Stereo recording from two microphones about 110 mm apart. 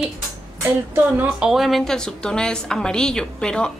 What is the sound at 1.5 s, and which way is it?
A woman's voice, centre (ahead or behind).